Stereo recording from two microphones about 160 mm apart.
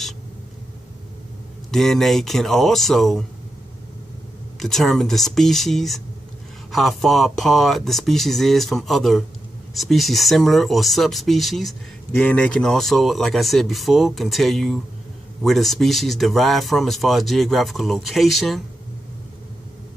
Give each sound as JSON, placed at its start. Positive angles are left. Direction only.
{"t": 1.7, "sound": "speech", "side_deg": 0}
{"t": 4.6, "sound": "speech", "side_deg": 0}